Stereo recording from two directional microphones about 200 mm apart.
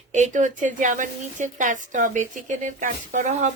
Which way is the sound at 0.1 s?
40° right (ahead or behind).